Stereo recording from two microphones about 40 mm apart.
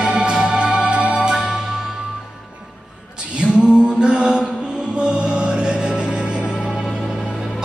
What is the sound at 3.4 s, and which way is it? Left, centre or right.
A capella, right.